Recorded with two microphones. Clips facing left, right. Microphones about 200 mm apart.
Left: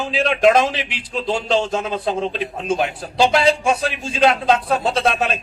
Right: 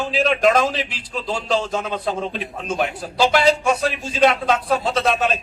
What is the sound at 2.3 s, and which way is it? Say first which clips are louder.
A man's voice: left 4 dB; centre (ahead or behind).